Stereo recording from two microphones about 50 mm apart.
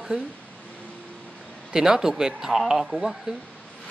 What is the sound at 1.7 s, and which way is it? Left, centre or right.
Speech, centre.